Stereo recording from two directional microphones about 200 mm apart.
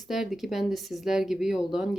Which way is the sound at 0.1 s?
Centre (ahead or behind).